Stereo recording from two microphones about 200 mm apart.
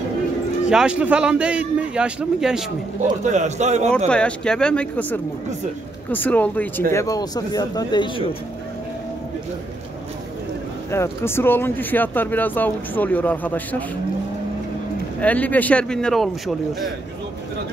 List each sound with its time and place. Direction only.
0.7 s a man's voice: 5° right (ahead or behind)
3.3 s a man's voice: 35° right (ahead or behind)
4.1 s a man's voice: 5° left (ahead or behind); by 8.4 s 20° left (ahead or behind)
10.9 s speech: 10° left (ahead or behind)
15.1 s a man's voice: 5° left (ahead or behind)